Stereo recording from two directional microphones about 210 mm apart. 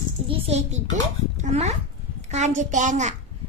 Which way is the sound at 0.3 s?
30° right (ahead or behind).